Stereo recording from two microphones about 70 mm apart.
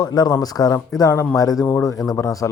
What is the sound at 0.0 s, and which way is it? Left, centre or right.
Speech, left.